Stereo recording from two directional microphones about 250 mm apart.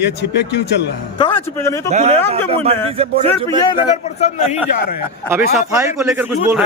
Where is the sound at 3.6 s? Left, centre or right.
Centre.